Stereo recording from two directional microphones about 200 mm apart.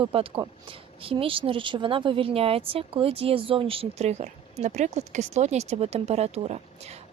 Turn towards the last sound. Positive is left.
turn(degrees=-30)  # may be behind; listen again after turning